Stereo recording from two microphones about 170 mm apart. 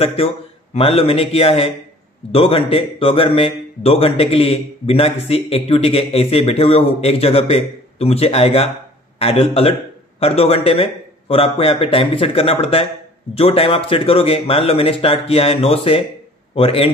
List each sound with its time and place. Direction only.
0.0 s a man's voice: 35° left (ahead or behind)